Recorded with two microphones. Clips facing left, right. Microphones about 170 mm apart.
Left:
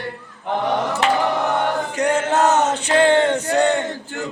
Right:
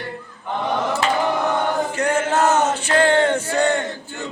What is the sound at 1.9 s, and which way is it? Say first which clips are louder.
Male singing: left 3 dB; 15° left (ahead or behind).